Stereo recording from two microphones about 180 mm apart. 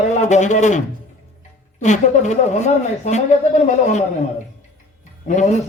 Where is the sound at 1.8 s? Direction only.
40° left (ahead or behind).